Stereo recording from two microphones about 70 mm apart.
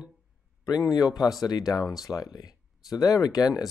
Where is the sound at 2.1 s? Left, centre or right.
Left.